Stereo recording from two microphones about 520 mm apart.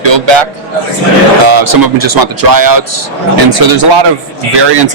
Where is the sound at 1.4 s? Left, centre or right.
Right.